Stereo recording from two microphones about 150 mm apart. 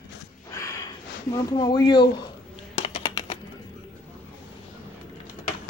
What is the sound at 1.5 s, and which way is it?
Speech, 30° left (ahead or behind).